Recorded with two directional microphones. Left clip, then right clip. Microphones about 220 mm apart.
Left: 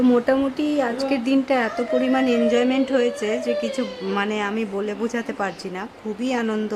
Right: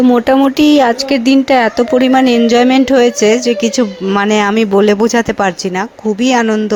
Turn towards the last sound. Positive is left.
turn(degrees=-30)  # may be behind; listen again after turning